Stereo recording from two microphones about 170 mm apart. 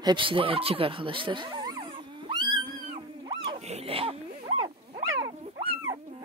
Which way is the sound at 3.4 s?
35° right (ahead or behind).